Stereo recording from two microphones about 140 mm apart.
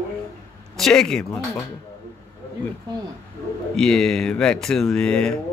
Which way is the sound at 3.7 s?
5° left (ahead or behind).